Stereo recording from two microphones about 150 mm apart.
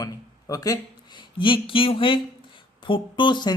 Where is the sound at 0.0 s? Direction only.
25° left (ahead or behind).